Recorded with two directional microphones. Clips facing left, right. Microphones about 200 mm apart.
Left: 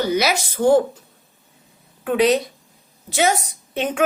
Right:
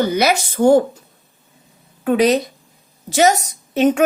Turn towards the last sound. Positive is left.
turn(degrees=-40)  # may be behind; listen again after turning